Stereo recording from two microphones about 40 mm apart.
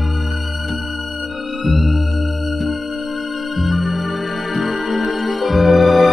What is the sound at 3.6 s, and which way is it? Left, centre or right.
Music, centre.